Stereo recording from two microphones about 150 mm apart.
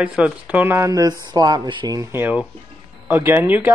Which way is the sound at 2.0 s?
15° right (ahead or behind).